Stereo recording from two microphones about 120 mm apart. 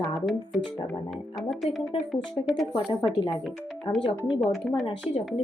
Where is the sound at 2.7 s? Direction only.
35° left (ahead or behind).